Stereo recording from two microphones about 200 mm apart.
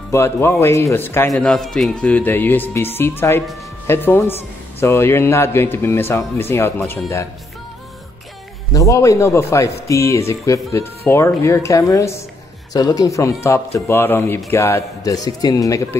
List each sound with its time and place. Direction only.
0.1 s speech: 15° left (ahead or behind)
8.7 s speech: 15° left (ahead or behind)